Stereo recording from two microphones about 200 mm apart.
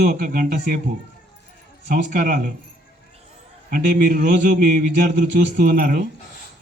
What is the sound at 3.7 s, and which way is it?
A man's voice, 40° right (ahead or behind).